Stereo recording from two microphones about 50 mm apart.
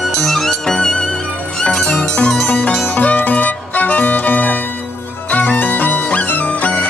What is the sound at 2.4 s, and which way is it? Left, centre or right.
Music, left.